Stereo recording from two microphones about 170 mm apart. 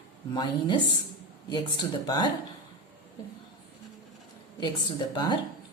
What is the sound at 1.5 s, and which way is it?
Speech, 25° left (ahead or behind).